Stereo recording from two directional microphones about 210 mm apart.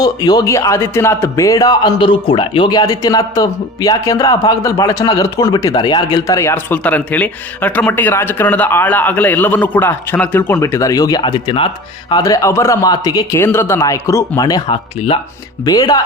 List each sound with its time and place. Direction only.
0.0 s a man's voice: 20° left (ahead or behind)